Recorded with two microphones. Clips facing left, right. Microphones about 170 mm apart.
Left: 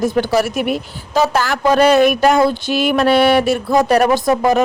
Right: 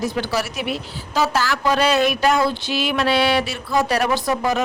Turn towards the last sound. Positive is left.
turn(degrees=50)  # may be behind; listen again after turning